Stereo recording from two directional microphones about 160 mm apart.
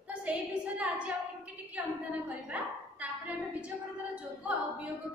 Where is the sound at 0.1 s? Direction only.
10° right (ahead or behind).